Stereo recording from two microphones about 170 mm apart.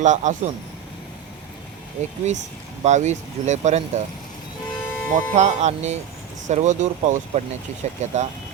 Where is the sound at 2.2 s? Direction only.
40° right (ahead or behind).